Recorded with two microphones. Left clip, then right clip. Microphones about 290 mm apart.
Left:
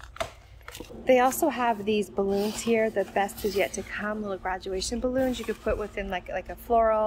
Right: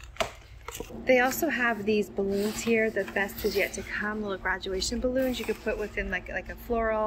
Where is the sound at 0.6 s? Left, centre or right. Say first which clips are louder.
Left 1 dB; centre.